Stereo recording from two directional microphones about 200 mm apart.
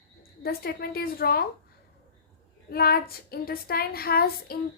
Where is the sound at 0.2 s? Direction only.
50° left (ahead or behind).